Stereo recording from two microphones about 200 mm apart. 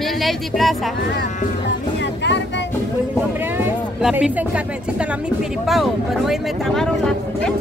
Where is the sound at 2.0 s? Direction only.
60° left (ahead or behind).